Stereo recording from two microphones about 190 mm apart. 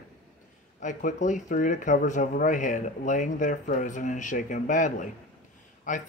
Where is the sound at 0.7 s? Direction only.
40° left (ahead or behind).